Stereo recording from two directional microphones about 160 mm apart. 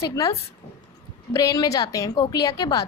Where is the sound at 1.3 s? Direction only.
25° left (ahead or behind).